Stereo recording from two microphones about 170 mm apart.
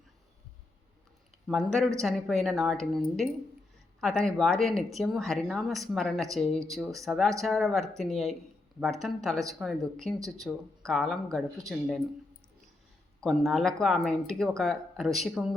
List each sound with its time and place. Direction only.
1.5 s speech: centre (ahead or behind)
13.1 s speech: centre (ahead or behind)